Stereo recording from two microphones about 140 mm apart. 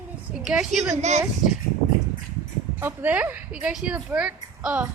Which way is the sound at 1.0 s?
55° right (ahead or behind).